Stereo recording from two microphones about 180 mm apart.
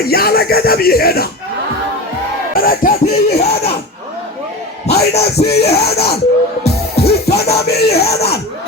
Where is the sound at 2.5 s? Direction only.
55° left (ahead or behind).